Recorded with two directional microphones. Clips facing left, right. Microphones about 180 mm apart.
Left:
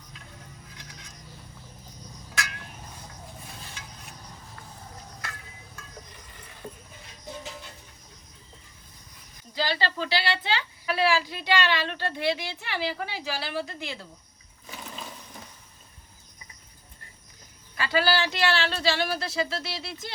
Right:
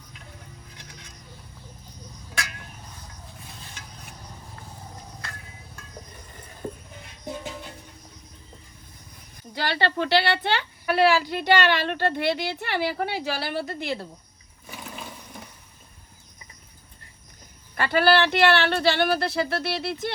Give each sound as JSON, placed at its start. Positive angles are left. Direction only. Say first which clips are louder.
{"t": 9.6, "sound": "a woman's voice", "louder": "right 3 dB", "side_deg": -60}
{"t": 14.7, "sound": "a sound", "louder": "right 2 dB", "side_deg": -10}
{"t": 17.7, "sound": "a woman's voice", "louder": "right 5 dB", "side_deg": -60}